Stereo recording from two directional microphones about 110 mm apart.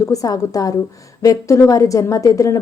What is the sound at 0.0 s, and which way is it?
Speech, 30° left (ahead or behind).